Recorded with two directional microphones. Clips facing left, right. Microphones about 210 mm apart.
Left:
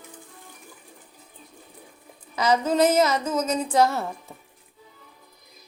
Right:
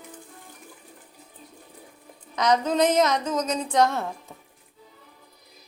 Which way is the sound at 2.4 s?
5° left (ahead or behind).